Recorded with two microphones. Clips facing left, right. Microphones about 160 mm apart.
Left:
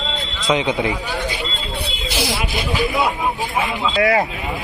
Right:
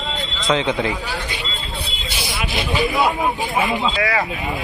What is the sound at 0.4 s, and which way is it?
Speech, 20° left (ahead or behind).